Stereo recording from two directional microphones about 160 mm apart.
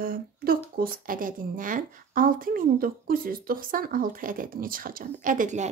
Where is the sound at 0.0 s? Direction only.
65° right (ahead or behind).